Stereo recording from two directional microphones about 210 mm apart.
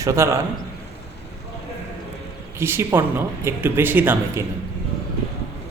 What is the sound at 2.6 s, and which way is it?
Speech, 10° right (ahead or behind).